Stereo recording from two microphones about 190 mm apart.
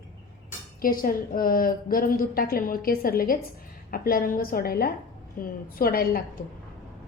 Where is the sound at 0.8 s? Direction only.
50° left (ahead or behind).